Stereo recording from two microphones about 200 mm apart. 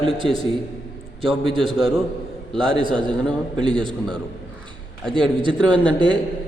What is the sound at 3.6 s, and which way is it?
Speech, 25° right (ahead or behind).